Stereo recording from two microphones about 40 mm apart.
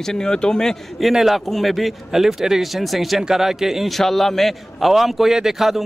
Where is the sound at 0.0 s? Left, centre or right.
Centre.